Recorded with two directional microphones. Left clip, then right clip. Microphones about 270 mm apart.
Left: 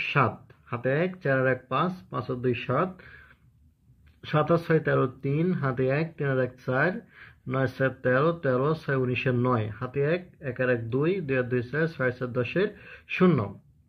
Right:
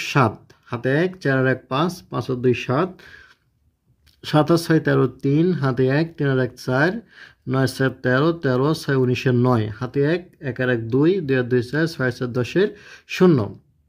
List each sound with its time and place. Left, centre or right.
0.0 s speech: right